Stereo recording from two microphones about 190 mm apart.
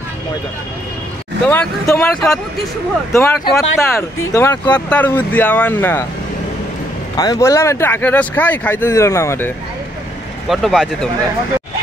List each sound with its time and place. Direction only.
1.5 s speech: 10° left (ahead or behind)
3.1 s speech: 15° left (ahead or behind)
7.2 s speech: 20° left (ahead or behind)
10.5 s speech: centre (ahead or behind)